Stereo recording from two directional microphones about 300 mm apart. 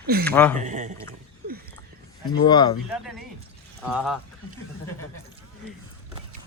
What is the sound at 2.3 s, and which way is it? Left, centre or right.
Speech, centre.